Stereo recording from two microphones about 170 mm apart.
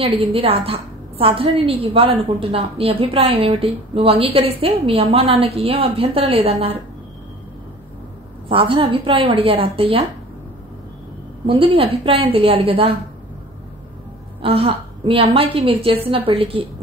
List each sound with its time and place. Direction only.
0.0 s a woman's voice: 35° right (ahead or behind)
8.5 s a woman's voice: 30° right (ahead or behind)
11.4 s a woman's voice: 30° right (ahead or behind)
14.4 s a woman's voice: 35° right (ahead or behind)